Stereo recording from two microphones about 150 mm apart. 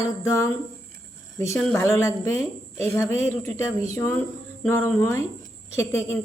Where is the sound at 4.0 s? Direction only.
15° left (ahead or behind).